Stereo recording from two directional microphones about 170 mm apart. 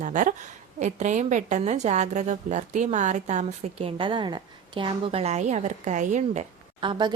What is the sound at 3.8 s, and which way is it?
A woman's voice, 30° right (ahead or behind).